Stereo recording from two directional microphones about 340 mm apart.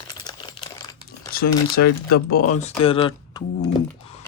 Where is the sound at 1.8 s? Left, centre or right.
Left.